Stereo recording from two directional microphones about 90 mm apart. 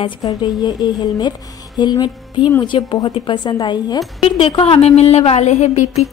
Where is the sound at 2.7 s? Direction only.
90° left.